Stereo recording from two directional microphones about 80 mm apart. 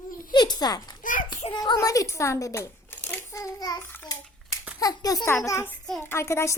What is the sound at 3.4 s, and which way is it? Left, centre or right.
Speech, left.